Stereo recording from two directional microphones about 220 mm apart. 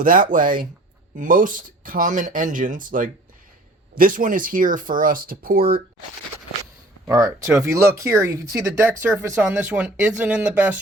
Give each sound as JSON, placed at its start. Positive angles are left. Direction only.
{"t": 0.0, "sound": "speech", "side_deg": -40}
{"t": 7.1, "sound": "speech", "side_deg": -15}